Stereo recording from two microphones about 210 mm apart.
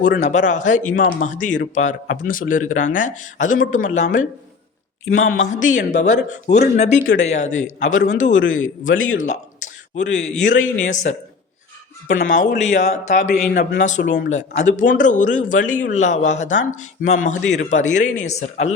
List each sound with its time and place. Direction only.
0.0 s a man's voice: 35° left (ahead or behind)
5.3 s a man's voice: 35° left (ahead or behind)
12.2 s a man's voice: 35° left (ahead or behind)